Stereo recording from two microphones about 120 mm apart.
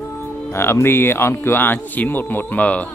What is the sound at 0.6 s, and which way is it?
Speech, 20° left (ahead or behind).